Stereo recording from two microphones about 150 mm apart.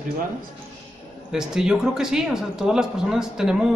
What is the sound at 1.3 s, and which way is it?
Speech, 5° right (ahead or behind).